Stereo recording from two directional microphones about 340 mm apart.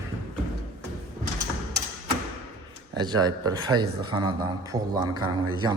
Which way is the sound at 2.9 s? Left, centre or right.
Centre.